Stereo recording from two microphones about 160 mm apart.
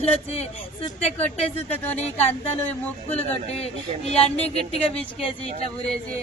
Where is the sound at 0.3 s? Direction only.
40° left (ahead or behind).